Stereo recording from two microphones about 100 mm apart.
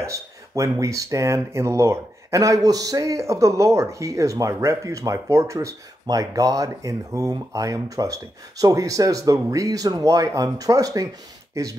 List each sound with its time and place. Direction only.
0.0 s speech: 30° right (ahead or behind)